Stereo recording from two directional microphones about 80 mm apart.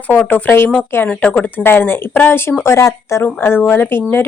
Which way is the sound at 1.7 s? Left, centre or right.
Left.